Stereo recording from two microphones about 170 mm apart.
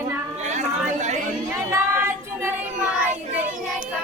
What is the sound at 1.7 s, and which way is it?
Child singing, 15° right (ahead or behind).